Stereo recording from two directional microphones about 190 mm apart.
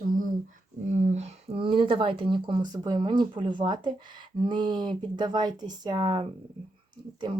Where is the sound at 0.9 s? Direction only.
35° right (ahead or behind).